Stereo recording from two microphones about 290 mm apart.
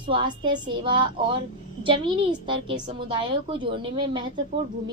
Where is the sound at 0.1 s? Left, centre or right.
Centre.